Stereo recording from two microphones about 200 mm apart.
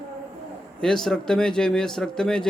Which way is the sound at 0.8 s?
5° left (ahead or behind).